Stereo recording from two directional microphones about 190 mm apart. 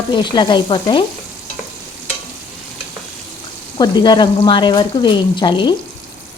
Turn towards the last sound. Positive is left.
turn(degrees=25)  # may be behind; listen again after turning